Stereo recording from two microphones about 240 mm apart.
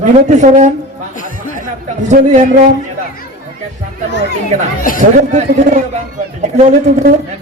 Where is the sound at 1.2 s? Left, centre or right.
Left.